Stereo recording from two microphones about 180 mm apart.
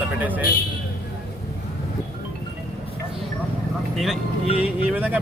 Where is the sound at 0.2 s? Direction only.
10° right (ahead or behind).